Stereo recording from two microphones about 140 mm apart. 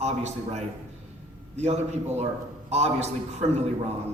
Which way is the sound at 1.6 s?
55° right (ahead or behind).